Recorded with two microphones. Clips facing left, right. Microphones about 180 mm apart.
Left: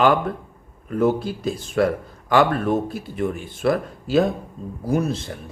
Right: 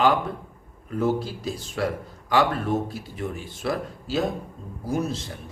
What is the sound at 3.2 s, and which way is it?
A man's voice, 55° left (ahead or behind).